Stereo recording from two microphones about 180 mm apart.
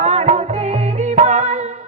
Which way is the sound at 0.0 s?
40° right (ahead or behind).